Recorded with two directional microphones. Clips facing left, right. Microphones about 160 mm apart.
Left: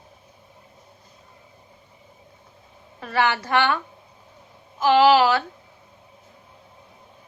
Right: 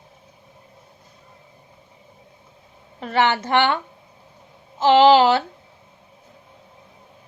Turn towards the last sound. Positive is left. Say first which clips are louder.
# right 3 dB
turn(degrees=-25)  # may be behind; listen again after turning